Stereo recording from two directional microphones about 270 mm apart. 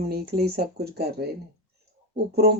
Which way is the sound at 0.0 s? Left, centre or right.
Right.